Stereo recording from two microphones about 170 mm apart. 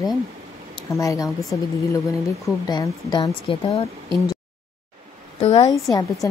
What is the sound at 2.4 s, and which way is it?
Speech, 20° left (ahead or behind).